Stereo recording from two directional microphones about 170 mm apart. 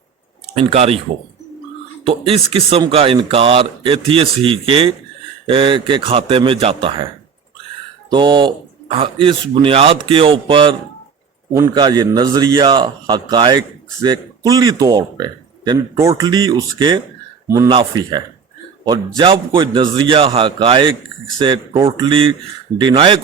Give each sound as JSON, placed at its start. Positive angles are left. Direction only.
{"t": 0.5, "sound": "speech", "side_deg": -35}
{"t": 2.0, "sound": "speech", "side_deg": -35}
{"t": 8.1, "sound": "a man's voice", "side_deg": -30}